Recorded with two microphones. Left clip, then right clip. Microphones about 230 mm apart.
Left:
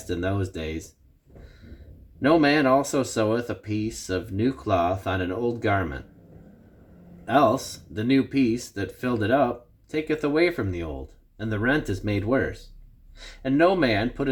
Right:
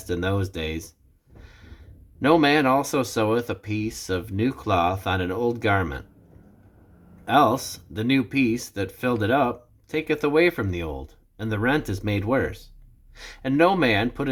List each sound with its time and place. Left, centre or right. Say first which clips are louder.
0.1 s speech: right 2 dB; right
2.2 s speech: right 1 dB; right
7.3 s speech: right 1 dB; centre